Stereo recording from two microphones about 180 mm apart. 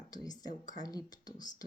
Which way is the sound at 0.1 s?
20° left (ahead or behind).